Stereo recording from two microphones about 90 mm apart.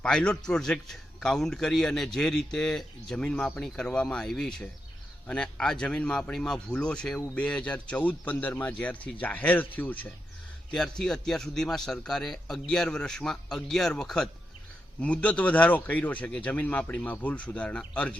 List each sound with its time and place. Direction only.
0.0 s a man's voice: 10° left (ahead or behind)
10.7 s a man's voice: 5° left (ahead or behind)